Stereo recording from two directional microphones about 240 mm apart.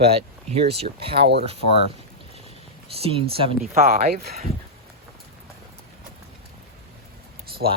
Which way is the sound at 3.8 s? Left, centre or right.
Right.